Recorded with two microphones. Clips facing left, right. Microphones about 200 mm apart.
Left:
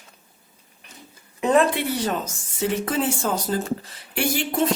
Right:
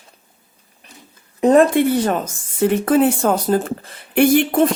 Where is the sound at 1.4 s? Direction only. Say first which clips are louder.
Right 7 dB; 40° right (ahead or behind).